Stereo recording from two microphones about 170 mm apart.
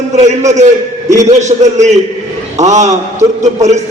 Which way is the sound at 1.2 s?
45° right (ahead or behind).